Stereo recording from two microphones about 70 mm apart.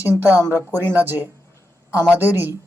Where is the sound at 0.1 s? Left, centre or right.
Right.